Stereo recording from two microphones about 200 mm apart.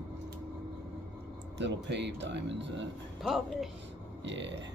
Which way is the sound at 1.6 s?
60° right (ahead or behind).